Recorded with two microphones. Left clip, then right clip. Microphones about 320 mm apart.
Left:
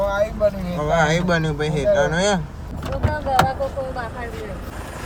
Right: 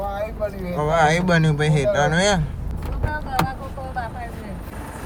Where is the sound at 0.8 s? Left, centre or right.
Right.